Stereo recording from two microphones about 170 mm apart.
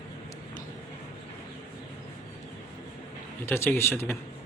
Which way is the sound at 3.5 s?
15° left (ahead or behind).